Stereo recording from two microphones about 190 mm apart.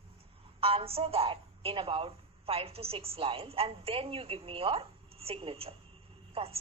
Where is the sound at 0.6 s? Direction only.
30° right (ahead or behind).